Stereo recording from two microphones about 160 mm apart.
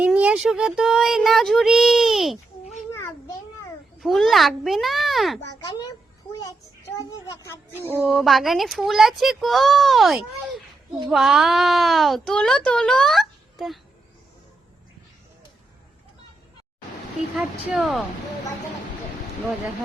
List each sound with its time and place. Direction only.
0.0 s a woman's voice: 10° right (ahead or behind)
4.0 s a woman's voice: centre (ahead or behind)
5.5 s speech: 20° left (ahead or behind)
7.3 s speech: 20° left (ahead or behind)
8.0 s a woman's voice: centre (ahead or behind)
17.3 s a woman's voice: 5° right (ahead or behind)